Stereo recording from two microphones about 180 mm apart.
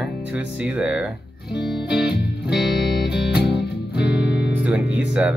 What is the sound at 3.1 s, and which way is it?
Music, 70° left (ahead or behind).